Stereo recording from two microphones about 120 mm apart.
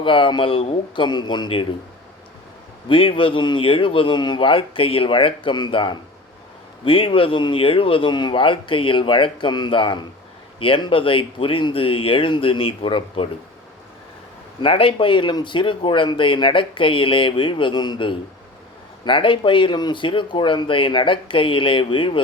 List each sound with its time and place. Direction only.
0.0 s speech: 45° left (ahead or behind)
2.9 s speech: 45° left (ahead or behind)
14.6 s speech: 50° left (ahead or behind)